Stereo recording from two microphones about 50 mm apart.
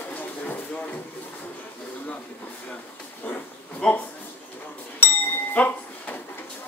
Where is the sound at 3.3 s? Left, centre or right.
Left.